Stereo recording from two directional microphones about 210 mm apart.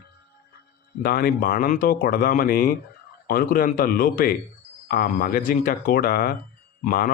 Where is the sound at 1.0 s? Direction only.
45° left (ahead or behind).